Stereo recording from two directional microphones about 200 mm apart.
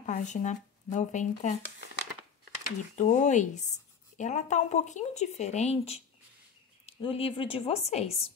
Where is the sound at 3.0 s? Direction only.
35° left (ahead or behind).